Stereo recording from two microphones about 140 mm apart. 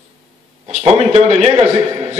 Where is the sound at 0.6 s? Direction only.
50° right (ahead or behind).